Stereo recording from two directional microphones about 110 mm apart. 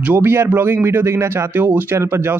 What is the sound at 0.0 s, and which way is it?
Speech, 20° right (ahead or behind).